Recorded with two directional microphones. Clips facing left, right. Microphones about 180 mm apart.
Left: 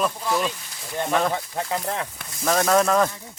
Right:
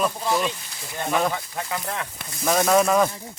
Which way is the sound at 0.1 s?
20° right (ahead or behind).